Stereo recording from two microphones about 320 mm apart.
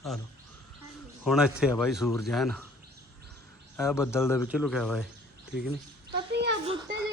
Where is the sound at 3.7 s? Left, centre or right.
Centre.